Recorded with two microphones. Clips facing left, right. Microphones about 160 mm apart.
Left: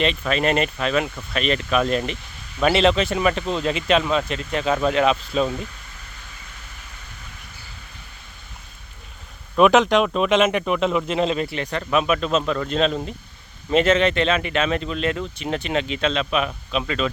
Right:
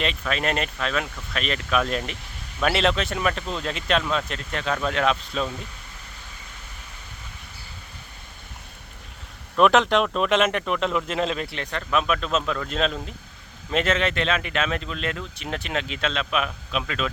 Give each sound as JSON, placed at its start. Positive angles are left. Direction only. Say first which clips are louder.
{"t": 0.0, "sound": "speech", "louder": "left 5 dB", "side_deg": 0}
{"t": 9.6, "sound": "speech", "louder": "left 3 dB", "side_deg": 5}